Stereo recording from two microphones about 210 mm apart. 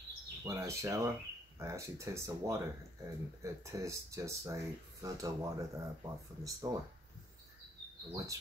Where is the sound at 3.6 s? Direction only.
15° right (ahead or behind).